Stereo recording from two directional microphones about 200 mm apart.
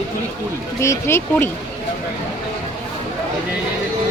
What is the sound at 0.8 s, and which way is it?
Speech, 15° left (ahead or behind).